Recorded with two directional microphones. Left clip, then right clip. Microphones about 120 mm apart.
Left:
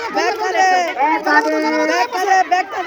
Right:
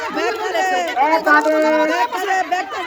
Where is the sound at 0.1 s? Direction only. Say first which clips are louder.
Left 5 dB; 25° right (ahead or behind).